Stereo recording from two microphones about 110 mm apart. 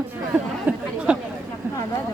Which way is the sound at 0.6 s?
10° right (ahead or behind).